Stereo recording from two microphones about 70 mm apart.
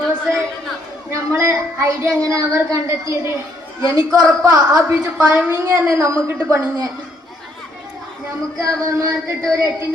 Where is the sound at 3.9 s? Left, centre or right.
Right.